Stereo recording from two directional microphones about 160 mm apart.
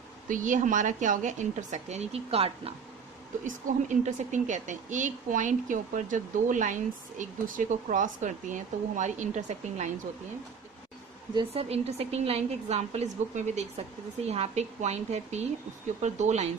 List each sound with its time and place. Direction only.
0.3 s speech: 55° right (ahead or behind); by 2.7 s 40° right (ahead or behind)
3.4 s speech: 55° right (ahead or behind)
11.3 s a woman's voice: 40° right (ahead or behind)